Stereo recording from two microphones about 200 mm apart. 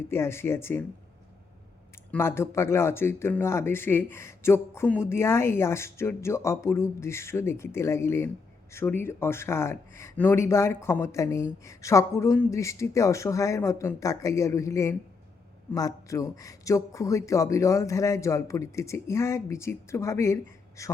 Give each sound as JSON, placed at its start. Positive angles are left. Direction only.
{"t": 0.1, "sound": "speech", "side_deg": 10}
{"t": 2.0, "sound": "speech", "side_deg": 10}